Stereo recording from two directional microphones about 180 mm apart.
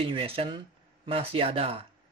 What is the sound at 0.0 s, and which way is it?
Speech, 30° right (ahead or behind).